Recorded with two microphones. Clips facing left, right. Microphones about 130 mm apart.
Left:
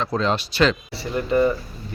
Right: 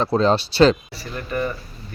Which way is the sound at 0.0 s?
35° right (ahead or behind).